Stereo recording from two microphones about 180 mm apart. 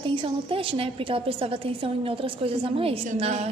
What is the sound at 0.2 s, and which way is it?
A woman's voice, 30° right (ahead or behind).